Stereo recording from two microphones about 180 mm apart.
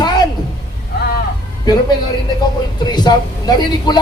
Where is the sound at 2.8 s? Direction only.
25° left (ahead or behind).